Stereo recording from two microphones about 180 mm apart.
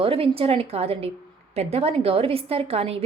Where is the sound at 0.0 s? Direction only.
30° right (ahead or behind).